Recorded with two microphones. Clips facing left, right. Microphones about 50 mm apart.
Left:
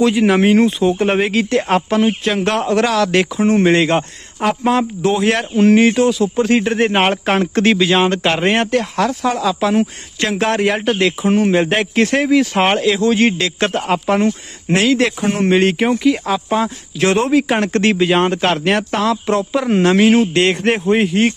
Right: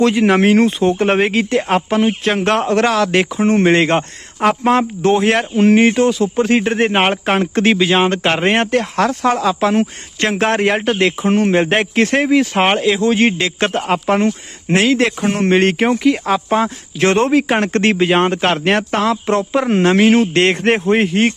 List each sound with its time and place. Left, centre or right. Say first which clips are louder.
0.0 s speech: right 1 dB; right
1.3 s speech: even; right
1.5 s speech: left 1 dB; centre
1.9 s speech: even; right
2.2 s speech: right 1 dB; right
4.4 s speech: right 2 dB; right
11.3 s a man's voice: even; right
11.6 s speech: right 1 dB; right
13.9 s speech: even; right
15.3 s speech: even; right
20.1 s a man's voice: right 1 dB; right
20.8 s a man's voice: even; right